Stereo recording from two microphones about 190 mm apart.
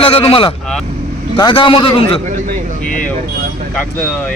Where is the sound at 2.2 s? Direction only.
45° right (ahead or behind).